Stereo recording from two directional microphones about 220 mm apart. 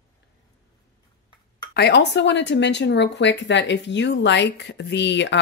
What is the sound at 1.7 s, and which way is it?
Speech, 50° left (ahead or behind).